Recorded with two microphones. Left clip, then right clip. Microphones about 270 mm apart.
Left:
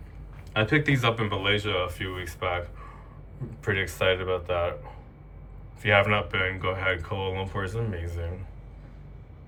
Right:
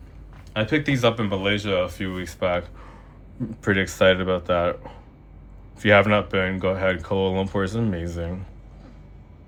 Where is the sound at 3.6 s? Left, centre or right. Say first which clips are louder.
Right 7 dB; right.